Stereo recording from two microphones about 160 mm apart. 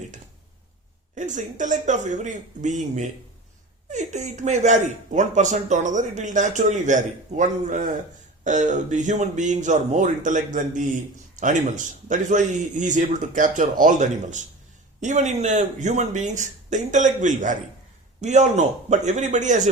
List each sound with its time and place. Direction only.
1.1 s speech: 50° right (ahead or behind)